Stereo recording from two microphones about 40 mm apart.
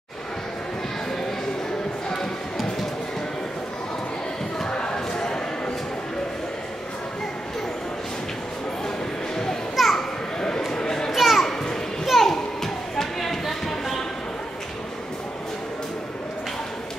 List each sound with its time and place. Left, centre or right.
4.6 s a sound: left
9.8 s children playing: centre
10.7 s chatter: centre
11.1 s children playing: centre
11.4 s children playing: centre
12.1 s music: centre
12.9 s a sound: centre